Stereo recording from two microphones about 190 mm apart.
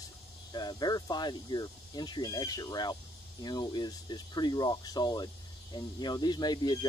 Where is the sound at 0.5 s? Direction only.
20° left (ahead or behind).